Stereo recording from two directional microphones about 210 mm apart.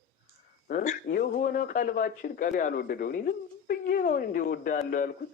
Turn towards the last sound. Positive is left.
turn(degrees=40)  # may be behind; listen again after turning